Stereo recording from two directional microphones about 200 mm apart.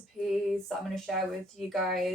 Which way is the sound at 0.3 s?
Centre (ahead or behind).